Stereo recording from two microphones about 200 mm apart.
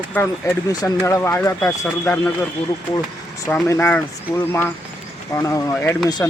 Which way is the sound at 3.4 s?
10° left (ahead or behind).